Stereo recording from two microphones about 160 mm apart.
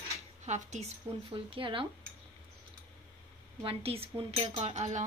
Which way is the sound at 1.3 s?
35° right (ahead or behind).